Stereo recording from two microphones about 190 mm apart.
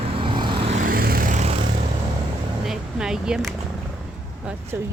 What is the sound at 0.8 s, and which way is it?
Vehicle, 50° right (ahead or behind).